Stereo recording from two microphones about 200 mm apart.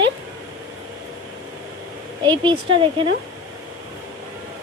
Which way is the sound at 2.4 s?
25° right (ahead or behind).